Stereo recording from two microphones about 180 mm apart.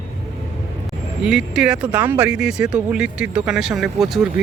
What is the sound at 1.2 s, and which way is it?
Speech, 5° right (ahead or behind).